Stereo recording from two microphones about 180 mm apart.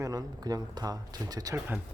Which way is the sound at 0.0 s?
20° right (ahead or behind).